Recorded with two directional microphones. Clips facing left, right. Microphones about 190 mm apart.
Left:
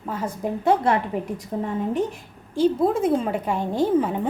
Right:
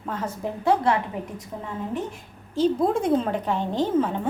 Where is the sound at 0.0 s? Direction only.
10° left (ahead or behind).